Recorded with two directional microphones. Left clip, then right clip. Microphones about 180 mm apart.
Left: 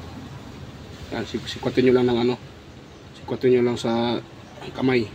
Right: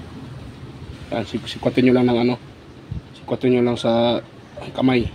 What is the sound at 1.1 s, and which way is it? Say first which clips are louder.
Speech: right 4 dB; 40° right (ahead or behind).